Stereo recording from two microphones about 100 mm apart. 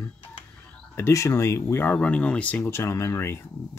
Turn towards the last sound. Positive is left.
turn(degrees=25)  # may be behind; listen again after turning